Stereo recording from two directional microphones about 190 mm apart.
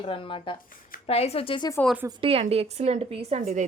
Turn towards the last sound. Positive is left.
turn(degrees=-35)  # may be behind; listen again after turning